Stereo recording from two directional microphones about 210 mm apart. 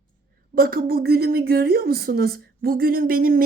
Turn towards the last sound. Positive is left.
turn(degrees=-45)  # may be behind; listen again after turning